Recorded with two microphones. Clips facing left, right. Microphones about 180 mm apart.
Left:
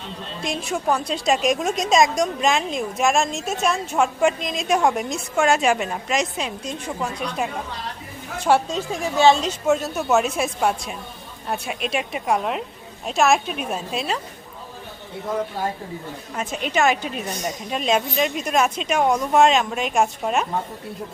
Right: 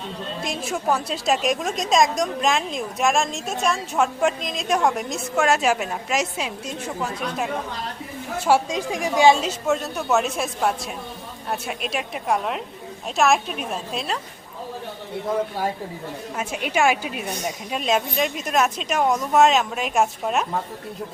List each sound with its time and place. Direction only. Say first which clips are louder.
0.4 s a woman's voice: left 2 dB; centre (ahead or behind)
16.3 s a woman's voice: left 1 dB; 10° right (ahead or behind)